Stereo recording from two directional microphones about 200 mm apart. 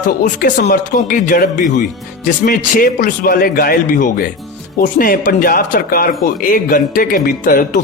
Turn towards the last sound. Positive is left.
turn(degrees=45)  # may be behind; listen again after turning